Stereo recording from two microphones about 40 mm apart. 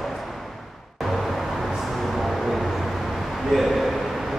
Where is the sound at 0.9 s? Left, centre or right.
Centre.